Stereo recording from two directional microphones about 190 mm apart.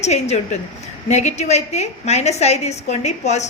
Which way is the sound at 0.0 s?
35° left (ahead or behind).